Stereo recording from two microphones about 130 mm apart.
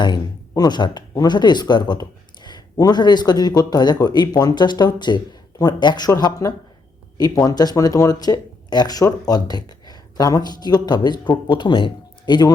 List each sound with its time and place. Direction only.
0.0 s speech: 30° left (ahead or behind)